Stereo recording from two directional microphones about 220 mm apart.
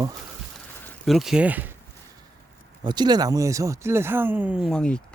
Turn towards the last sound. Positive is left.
turn(degrees=5)  # may be behind; listen again after turning